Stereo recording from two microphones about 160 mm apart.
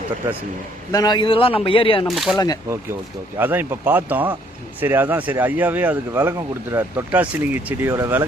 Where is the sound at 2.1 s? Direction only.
Centre (ahead or behind).